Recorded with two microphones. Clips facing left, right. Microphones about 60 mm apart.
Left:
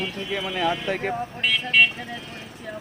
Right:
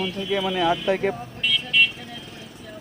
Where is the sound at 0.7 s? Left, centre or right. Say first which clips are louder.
Right 3 dB; left.